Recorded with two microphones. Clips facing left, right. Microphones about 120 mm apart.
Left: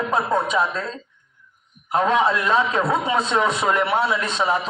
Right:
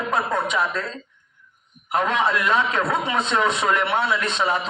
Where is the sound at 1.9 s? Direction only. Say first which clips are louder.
Left 3 dB; 30° left (ahead or behind).